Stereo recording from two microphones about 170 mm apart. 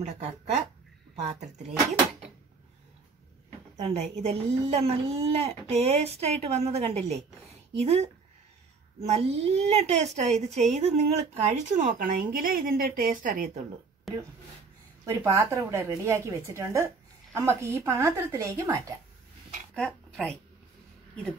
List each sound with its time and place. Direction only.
0.0 s a woman's voice: 40° right (ahead or behind)
3.7 s a woman's voice: 35° right (ahead or behind)
14.1 s speech: centre (ahead or behind)
15.0 s a woman's voice: 15° right (ahead or behind)
19.7 s speech: 5° left (ahead or behind)